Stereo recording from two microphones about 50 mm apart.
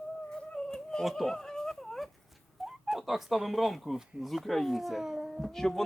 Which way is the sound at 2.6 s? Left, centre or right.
Centre.